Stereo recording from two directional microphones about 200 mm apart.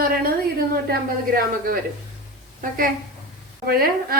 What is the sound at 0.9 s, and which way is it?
Speech, 50° right (ahead or behind).